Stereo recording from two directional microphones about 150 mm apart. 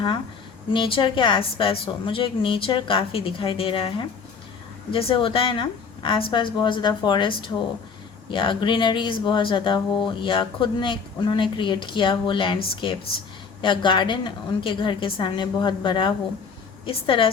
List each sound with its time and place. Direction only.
0.7 s speech: 35° left (ahead or behind)